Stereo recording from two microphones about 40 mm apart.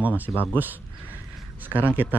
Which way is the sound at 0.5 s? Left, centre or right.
Right.